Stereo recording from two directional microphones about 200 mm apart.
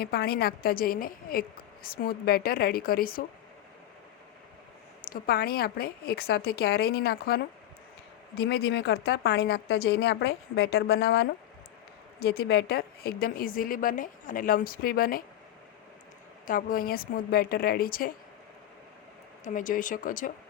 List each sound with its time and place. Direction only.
0.0 s a woman's voice: 50° left (ahead or behind)
5.1 s a woman's voice: 50° left (ahead or behind)
8.4 s a woman's voice: 60° left (ahead or behind)
16.5 s a woman's voice: 45° left (ahead or behind)
19.5 s speech: 40° left (ahead or behind)